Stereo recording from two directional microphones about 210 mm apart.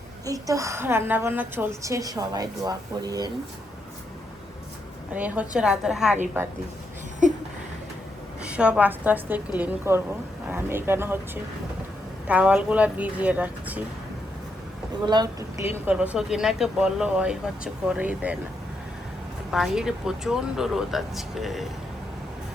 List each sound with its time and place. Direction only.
0.3 s a woman's voice: 15° right (ahead or behind)
5.1 s speech: 5° right (ahead or behind)
8.4 s a woman's voice: 5° right (ahead or behind)
12.3 s a woman's voice: 5° right (ahead or behind)
15.0 s speech: 20° right (ahead or behind)
15.7 s speech: 5° right (ahead or behind)
19.5 s speech: centre (ahead or behind)